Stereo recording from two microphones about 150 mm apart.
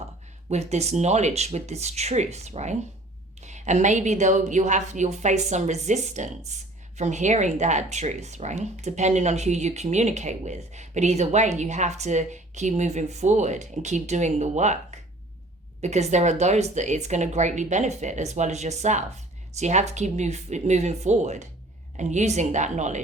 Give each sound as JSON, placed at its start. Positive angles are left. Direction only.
{"t": 0.5, "sound": "a woman's voice", "side_deg": -45}